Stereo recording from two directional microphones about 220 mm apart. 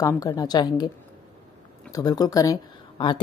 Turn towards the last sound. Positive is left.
turn(degrees=20)  # may be behind; listen again after turning